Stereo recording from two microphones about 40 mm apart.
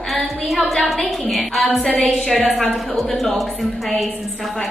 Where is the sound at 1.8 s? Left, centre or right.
Left.